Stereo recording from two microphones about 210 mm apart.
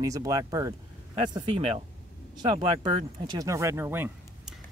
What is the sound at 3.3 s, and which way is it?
Speech, 15° right (ahead or behind).